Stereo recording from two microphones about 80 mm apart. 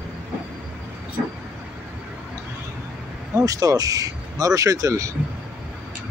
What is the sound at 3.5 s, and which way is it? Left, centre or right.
Speech, right.